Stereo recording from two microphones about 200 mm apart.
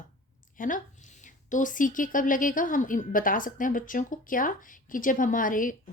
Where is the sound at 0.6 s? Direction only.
40° left (ahead or behind).